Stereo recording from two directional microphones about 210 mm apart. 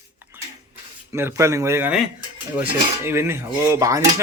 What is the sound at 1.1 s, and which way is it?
Cutlery, 15° right (ahead or behind).